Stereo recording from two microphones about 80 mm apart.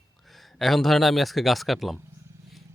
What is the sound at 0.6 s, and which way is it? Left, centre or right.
Speech, centre.